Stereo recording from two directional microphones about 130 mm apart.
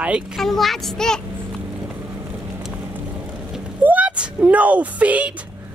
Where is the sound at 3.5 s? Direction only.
10° right (ahead or behind).